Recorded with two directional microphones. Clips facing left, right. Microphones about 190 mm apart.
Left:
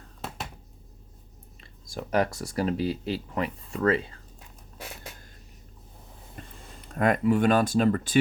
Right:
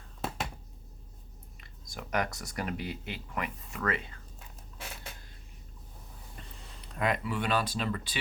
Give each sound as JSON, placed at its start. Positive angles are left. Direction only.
{"t": 1.6, "sound": "speech", "side_deg": 30}
{"t": 6.7, "sound": "speech", "side_deg": 50}